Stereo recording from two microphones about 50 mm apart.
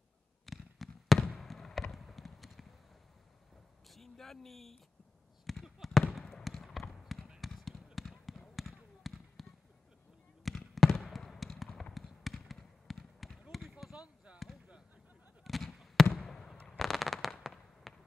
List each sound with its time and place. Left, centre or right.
0.5 s fireworks: centre
3.9 s a sound: centre
5.5 s fireworks: centre
6.1 s trickle: centre
7.3 s basketball bounce: centre
10.4 s fireworks: centre
13.4 s basketball bounce: centre
13.9 s basketball bounce: right
15.4 s a sound: centre
16.1 s fireworks: centre
16.7 s fireworks: centre